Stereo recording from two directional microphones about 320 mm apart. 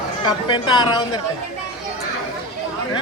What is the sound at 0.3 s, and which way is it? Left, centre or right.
Speech, centre.